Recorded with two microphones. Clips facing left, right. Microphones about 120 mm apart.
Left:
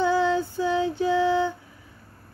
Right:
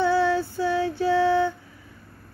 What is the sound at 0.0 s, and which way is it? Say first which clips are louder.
Female singing: right 1 dB; 15° left (ahead or behind).